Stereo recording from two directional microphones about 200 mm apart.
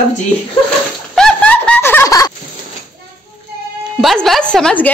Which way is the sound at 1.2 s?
5° left (ahead or behind).